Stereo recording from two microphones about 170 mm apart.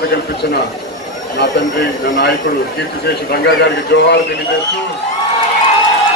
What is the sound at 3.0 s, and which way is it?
A man's voice, 75° left (ahead or behind).